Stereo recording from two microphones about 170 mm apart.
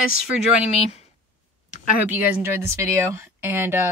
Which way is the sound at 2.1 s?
15° right (ahead or behind).